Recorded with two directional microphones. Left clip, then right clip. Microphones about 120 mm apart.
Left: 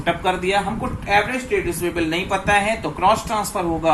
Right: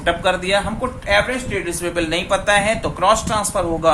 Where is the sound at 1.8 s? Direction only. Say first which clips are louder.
Right 1 dB; 30° right (ahead or behind).